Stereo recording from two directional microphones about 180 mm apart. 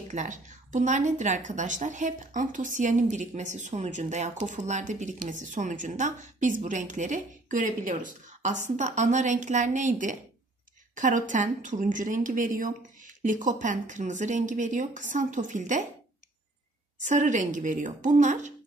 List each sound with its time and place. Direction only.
0.1 s speech: 45° right (ahead or behind)
17.0 s speech: 45° right (ahead or behind)